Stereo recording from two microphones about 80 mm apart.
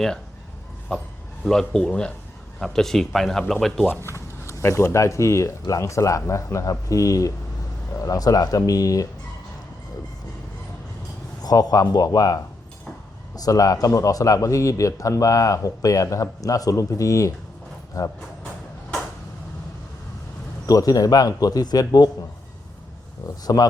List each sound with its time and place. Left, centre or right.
0.9 s speech: centre
3.8 s speech: left
11.4 s speech: left
20.7 s speech: left
23.2 s speech: left